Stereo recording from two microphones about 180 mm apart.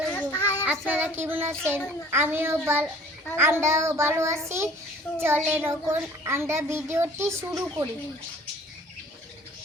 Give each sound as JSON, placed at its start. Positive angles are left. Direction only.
{"t": 0.1, "sound": "child singing", "side_deg": 15}
{"t": 0.6, "sound": "a child's voice", "side_deg": -10}